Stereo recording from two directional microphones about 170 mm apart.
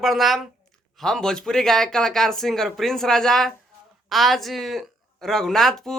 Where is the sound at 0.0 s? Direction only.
Centre (ahead or behind).